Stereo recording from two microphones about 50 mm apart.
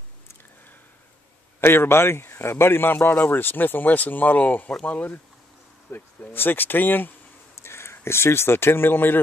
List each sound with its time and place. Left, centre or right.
1.6 s a man's voice: left
5.9 s a man's voice: left
7.6 s speech: left